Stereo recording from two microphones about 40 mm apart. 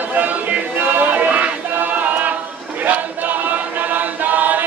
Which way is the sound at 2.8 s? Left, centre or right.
Right.